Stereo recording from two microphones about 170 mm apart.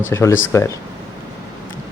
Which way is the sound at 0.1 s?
15° left (ahead or behind).